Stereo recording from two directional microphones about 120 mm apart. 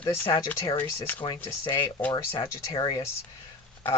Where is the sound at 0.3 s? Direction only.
40° left (ahead or behind).